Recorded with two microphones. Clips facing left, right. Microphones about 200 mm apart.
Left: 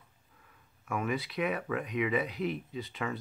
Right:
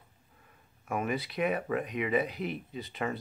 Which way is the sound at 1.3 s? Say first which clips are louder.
Right 2 dB; 45° right (ahead or behind).